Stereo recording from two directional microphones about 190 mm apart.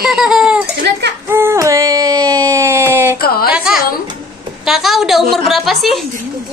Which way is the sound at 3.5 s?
5° right (ahead or behind).